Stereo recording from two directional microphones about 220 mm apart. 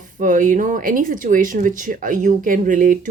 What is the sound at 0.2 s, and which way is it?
Speech, 35° right (ahead or behind).